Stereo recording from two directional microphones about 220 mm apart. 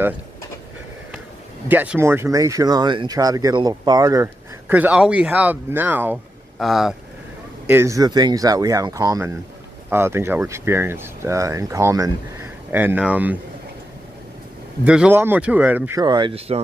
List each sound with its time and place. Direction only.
1.7 s speech: 10° right (ahead or behind)
14.9 s speech: 5° right (ahead or behind); by 16.6 s 25° right (ahead or behind)